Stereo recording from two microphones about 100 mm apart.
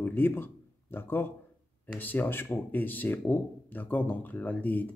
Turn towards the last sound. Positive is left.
turn(degrees=15)  # may be behind; listen again after turning